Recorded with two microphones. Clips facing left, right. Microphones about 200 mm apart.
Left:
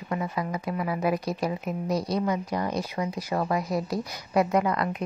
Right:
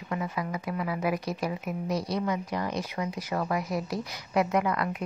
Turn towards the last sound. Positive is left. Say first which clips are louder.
# left 2 dB
turn(degrees=35)  # may be behind; listen again after turning